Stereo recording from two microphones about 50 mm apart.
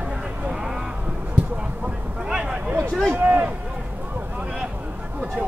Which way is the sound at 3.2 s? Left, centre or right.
Right.